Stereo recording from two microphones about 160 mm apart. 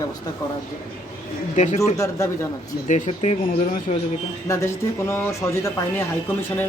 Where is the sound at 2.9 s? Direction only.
45° left (ahead or behind).